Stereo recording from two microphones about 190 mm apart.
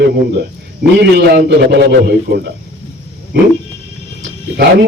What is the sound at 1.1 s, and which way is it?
A man's voice, 65° right (ahead or behind).